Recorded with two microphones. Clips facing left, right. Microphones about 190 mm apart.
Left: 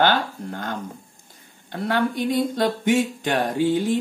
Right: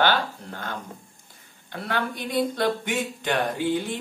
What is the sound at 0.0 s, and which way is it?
Speech, 45° left (ahead or behind).